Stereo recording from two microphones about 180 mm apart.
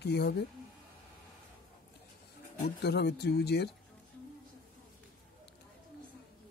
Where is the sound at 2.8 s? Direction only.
65° left (ahead or behind).